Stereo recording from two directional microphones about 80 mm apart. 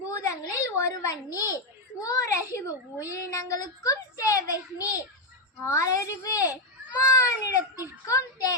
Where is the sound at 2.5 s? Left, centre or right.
Left.